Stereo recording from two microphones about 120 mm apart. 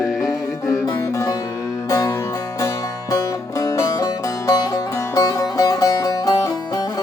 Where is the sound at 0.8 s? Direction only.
30° left (ahead or behind).